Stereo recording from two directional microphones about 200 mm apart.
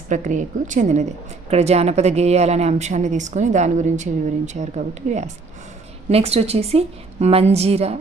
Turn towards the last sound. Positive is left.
turn(degrees=-30)  # may be behind; listen again after turning